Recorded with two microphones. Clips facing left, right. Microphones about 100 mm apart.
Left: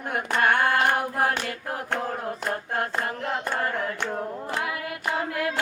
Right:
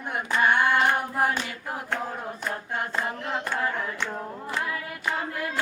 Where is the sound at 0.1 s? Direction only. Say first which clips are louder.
Left 1 dB; 60° left (ahead or behind).